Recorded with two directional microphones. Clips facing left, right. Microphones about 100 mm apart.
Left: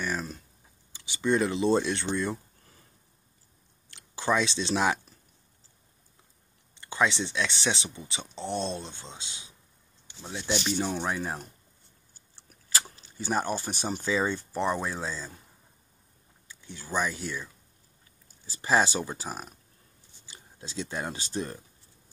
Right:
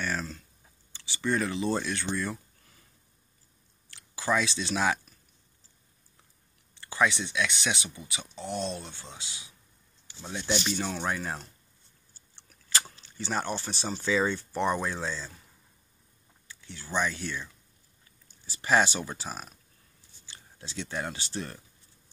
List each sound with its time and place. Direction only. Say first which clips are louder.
0.0 s a sound: left 1 dB; 15° left (ahead or behind)
0.9 s speech: left 3 dB; 20° left (ahead or behind)
3.9 s speech: left 1 dB; 25° left (ahead or behind)
6.7 s speech: even; 20° left (ahead or behind)
10.2 s speech: even; 5° left (ahead or behind)
13.2 s speech: left 3 dB; 15° left (ahead or behind)
13.6 s speech: left 2 dB; 45° left (ahead or behind)
14.0 s speech: right 2 dB; 5° left (ahead or behind)
16.6 s speech: even; 15° left (ahead or behind)
18.6 s speech: even; 20° left (ahead or behind)